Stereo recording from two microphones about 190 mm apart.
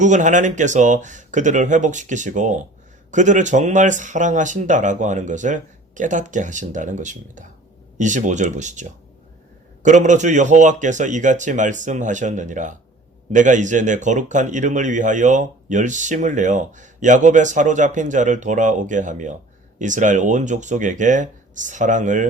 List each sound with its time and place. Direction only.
0.0 s speech: 40° right (ahead or behind)